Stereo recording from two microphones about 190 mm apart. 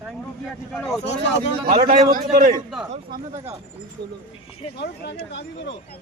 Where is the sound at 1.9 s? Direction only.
45° right (ahead or behind).